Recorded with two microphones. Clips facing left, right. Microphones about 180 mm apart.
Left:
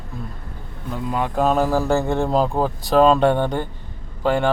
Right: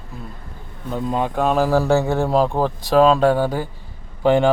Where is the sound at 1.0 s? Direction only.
25° right (ahead or behind).